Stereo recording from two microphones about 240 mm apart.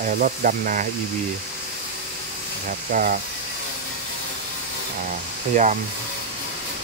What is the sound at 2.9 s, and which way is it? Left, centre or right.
Speech, right.